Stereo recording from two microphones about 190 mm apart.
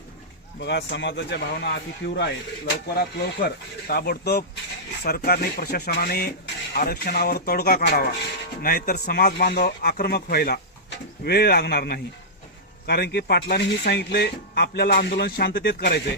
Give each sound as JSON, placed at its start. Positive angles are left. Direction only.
{"t": 0.6, "sound": "speech", "side_deg": 65}